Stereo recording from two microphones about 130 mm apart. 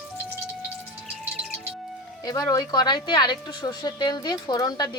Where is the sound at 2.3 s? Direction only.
30° left (ahead or behind).